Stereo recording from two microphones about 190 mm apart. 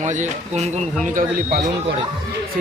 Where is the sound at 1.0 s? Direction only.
50° right (ahead or behind).